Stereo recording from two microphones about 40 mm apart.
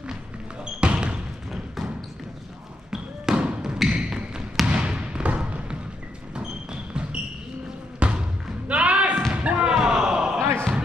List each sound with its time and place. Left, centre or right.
0.7 s basketball bounce: right
2.9 s basketball bounce: centre
6.3 s a sound: right
8.0 s basketball bounce: right
8.6 s thump: right
9.8 s a sound: centre